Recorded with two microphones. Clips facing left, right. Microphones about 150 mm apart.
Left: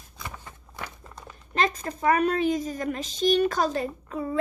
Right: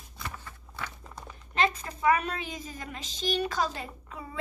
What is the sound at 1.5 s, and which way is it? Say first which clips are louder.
A woman's voice: left 2 dB; 40° left (ahead or behind).